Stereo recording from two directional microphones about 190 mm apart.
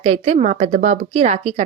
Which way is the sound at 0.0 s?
35° right (ahead or behind).